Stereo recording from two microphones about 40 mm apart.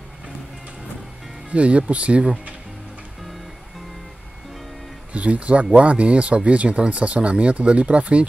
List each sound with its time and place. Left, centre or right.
1.5 s speech: right
5.1 s speech: right